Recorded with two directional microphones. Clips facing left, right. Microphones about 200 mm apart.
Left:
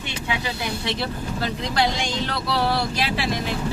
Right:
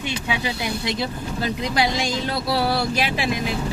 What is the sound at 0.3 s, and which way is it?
Speech, 15° right (ahead or behind).